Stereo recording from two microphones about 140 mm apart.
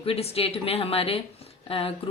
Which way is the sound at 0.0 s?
45° left (ahead or behind).